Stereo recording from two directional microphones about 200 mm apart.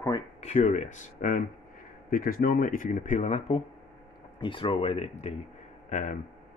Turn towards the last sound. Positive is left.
turn(degrees=40)  # may be behind; listen again after turning